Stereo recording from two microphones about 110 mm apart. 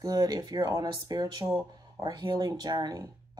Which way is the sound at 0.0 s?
35° right (ahead or behind).